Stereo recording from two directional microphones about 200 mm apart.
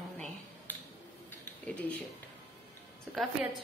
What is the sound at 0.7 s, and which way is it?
Finger snapping, 10° left (ahead or behind).